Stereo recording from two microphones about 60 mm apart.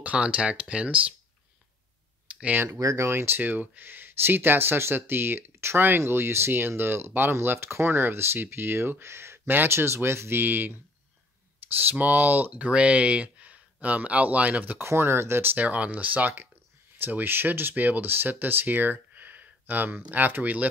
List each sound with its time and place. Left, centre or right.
0.0 s speech: right
2.3 s a sound: right
2.8 s speech: right
3.1 s speech: right
14.8 s speech: right